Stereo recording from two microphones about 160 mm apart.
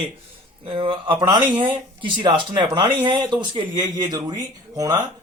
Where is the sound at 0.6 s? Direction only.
35° right (ahead or behind).